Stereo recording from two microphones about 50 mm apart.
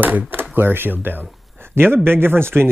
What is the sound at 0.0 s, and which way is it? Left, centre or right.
Speech, right.